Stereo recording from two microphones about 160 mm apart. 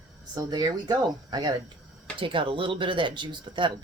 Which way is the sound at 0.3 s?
25° right (ahead or behind).